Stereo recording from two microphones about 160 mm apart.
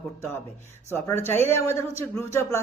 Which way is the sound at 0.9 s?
15° left (ahead or behind).